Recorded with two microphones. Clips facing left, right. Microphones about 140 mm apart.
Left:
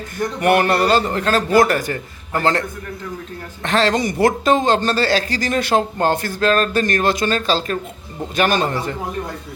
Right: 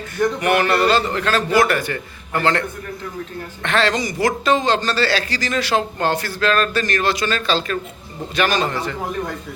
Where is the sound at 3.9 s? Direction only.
60° left (ahead or behind).